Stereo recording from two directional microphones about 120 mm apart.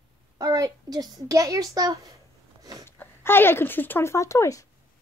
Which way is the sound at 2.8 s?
20° left (ahead or behind).